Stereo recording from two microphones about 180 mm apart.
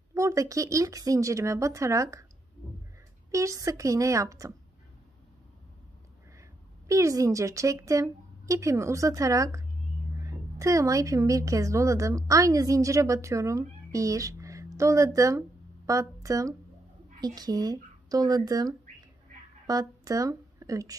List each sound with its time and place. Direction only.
0.1 s a woman's voice: 15° right (ahead or behind)
3.3 s a woman's voice: 15° right (ahead or behind)
6.9 s a woman's voice: 15° right (ahead or behind)